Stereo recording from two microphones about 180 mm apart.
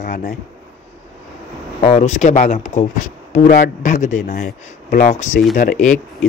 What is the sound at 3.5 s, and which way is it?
Speech, 55° left (ahead or behind).